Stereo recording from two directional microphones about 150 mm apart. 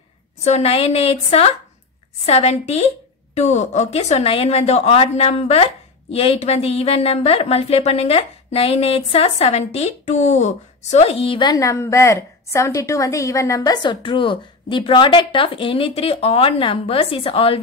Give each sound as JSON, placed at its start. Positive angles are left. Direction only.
{"t": 0.4, "sound": "a woman's voice", "side_deg": 45}